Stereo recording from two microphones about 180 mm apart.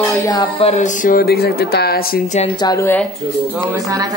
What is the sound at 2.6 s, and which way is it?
Speech, 20° left (ahead or behind).